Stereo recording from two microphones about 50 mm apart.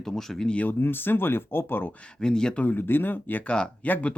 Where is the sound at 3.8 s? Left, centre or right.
Left.